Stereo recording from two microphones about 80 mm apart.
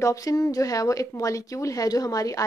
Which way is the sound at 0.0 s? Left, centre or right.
Left.